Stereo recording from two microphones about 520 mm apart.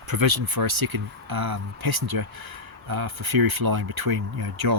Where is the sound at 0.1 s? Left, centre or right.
Right.